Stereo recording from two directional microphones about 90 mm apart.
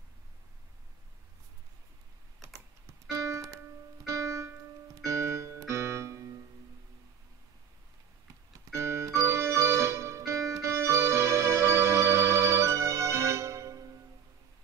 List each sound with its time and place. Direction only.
3.1 s keyboard: 35° right (ahead or behind)
8.7 s music: 30° right (ahead or behind)